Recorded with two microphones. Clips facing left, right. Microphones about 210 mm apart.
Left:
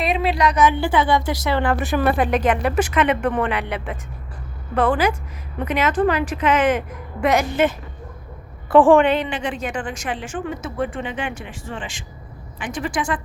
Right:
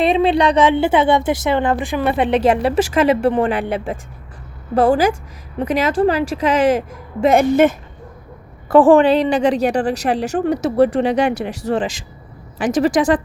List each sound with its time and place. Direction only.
0.0 s a woman's voice: 30° right (ahead or behind)
7.3 s speech: 50° right (ahead or behind)
8.7 s a woman's voice: 35° right (ahead or behind)
12.9 s speech: 90° right